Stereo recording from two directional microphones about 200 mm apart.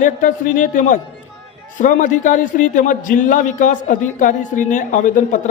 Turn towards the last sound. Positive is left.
turn(degrees=40)  # may be behind; listen again after turning